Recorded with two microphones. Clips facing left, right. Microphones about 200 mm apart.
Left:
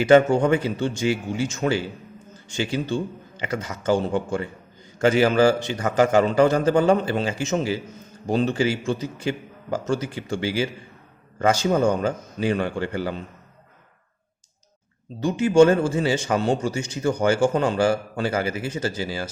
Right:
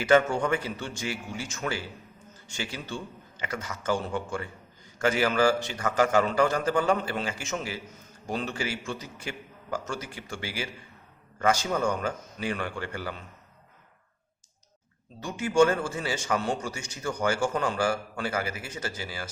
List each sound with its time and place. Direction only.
0.0 s a man's voice: 20° left (ahead or behind)
15.2 s a man's voice: 25° left (ahead or behind)